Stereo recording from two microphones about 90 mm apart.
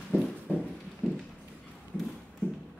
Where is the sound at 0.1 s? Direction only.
20° left (ahead or behind).